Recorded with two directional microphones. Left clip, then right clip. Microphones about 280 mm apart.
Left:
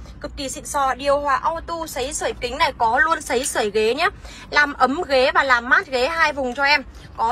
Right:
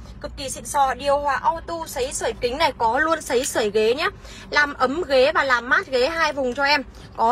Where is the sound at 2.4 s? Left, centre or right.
Centre.